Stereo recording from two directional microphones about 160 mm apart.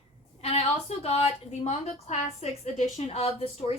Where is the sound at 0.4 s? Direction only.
40° left (ahead or behind).